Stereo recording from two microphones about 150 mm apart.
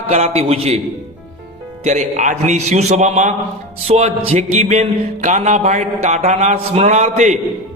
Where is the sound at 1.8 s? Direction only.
50° right (ahead or behind).